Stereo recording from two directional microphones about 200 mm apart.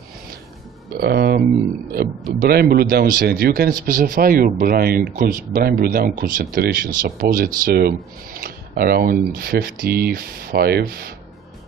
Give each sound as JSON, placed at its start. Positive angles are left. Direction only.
{"t": 0.9, "sound": "speech", "side_deg": -55}
{"t": 2.4, "sound": "speech", "side_deg": -50}